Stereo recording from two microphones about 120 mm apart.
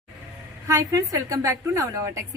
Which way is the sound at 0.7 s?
25° right (ahead or behind).